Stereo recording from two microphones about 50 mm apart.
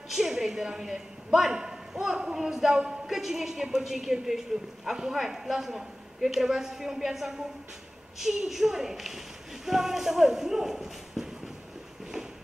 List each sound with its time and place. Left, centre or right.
0.1 s a man's voice: centre